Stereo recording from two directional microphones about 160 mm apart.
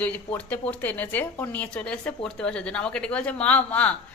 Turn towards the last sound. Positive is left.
turn(degrees=10)  # may be behind; listen again after turning